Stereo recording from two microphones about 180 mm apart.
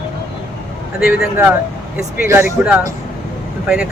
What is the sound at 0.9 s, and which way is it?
Speech, 55° left (ahead or behind).